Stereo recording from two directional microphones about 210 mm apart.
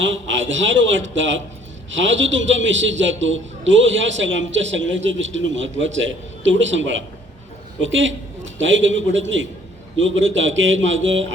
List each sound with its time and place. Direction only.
0.0 s a man's voice: 60° right (ahead or behind)